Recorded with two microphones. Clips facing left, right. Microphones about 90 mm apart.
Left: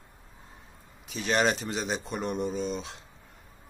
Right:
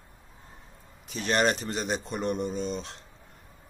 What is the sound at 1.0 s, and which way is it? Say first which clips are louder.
Speech: right 1 dB; centre (ahead or behind).